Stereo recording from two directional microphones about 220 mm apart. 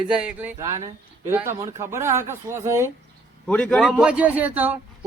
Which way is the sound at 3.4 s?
5° left (ahead or behind).